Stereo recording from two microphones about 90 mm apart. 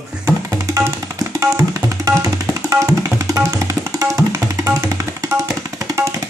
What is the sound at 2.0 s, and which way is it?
Music, 35° right (ahead or behind).